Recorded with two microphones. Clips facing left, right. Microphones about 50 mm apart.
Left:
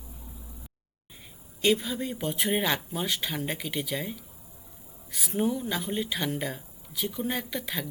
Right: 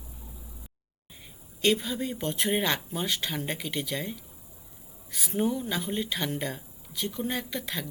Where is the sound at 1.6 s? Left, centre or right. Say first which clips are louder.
Even; centre.